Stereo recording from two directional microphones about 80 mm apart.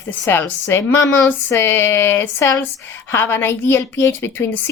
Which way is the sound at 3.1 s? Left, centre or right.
Left.